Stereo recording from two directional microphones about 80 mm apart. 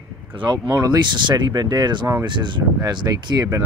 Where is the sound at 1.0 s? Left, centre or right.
Right.